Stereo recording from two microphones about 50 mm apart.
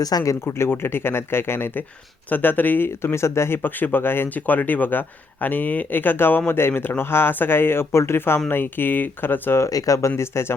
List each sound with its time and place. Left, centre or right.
0.4 s speech: left
2.3 s speech: left
3.0 s speech: left
3.6 s speech: left
4.4 s speech: left
8.4 s speech: left
9.6 s speech: left
10.2 s speech: left